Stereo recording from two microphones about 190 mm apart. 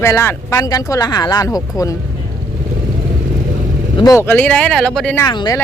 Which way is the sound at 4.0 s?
15° left (ahead or behind).